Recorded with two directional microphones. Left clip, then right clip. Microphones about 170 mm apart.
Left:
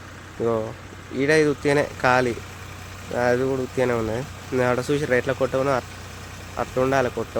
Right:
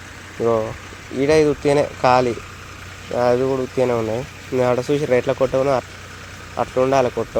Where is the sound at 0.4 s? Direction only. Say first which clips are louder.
Right 5 dB; centre (ahead or behind).